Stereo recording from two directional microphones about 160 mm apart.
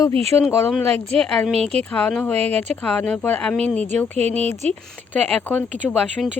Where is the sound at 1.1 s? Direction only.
5° left (ahead or behind).